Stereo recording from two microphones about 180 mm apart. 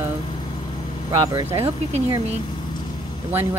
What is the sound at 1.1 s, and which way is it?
Speech, 15° right (ahead or behind).